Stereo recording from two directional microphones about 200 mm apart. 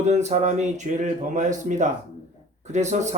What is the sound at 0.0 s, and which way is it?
Speech, 35° right (ahead or behind).